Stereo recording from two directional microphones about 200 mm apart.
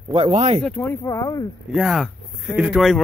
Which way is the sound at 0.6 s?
10° left (ahead or behind).